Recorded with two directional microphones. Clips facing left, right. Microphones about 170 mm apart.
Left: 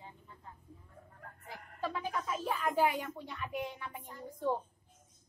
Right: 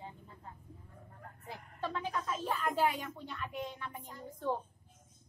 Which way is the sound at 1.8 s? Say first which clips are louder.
Left 1 dB; 10° left (ahead or behind).